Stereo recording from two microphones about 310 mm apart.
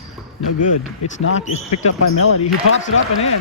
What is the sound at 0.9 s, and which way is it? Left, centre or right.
Speech, left.